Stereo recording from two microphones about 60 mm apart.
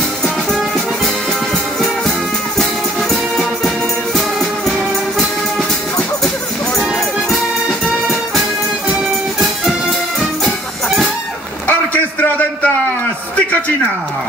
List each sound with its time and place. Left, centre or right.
0.2 s music: centre
7.8 s music: centre
11.6 s a sound: left